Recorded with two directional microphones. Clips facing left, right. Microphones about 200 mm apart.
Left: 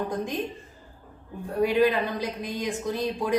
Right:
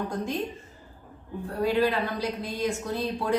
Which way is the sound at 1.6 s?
15° left (ahead or behind).